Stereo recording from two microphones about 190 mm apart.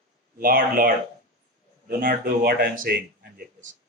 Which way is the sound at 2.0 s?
50° right (ahead or behind).